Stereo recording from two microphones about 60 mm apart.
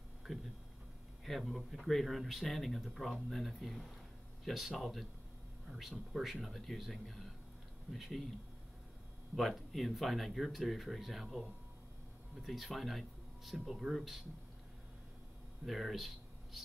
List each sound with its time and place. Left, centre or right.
0.2 s a sound: centre
1.2 s speech: centre
9.3 s speech: centre
12.4 s speech: centre
15.6 s speech: centre